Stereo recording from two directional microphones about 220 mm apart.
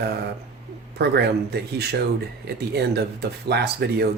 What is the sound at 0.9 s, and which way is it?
Speech, 50° right (ahead or behind).